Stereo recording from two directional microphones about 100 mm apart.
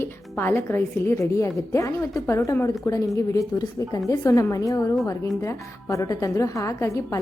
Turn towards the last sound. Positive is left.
turn(degrees=30)  # may be behind; listen again after turning